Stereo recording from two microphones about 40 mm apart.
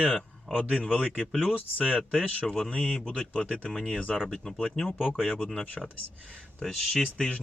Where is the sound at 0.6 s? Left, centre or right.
Left.